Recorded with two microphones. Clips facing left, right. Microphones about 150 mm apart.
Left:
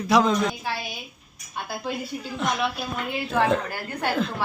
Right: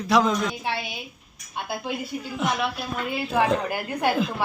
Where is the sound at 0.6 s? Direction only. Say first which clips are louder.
Right 1 dB; 25° right (ahead or behind).